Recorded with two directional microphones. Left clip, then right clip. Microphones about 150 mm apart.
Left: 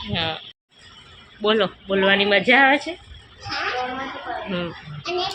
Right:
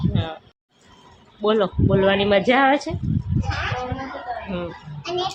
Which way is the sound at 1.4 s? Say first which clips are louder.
Right 1 dB; 20° right (ahead or behind).